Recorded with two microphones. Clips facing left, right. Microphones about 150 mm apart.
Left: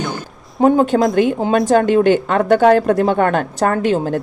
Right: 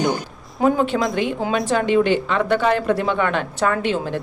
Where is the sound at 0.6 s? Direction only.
45° left (ahead or behind).